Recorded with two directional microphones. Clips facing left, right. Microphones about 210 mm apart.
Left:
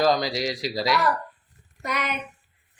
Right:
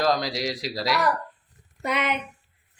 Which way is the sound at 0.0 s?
Centre (ahead or behind).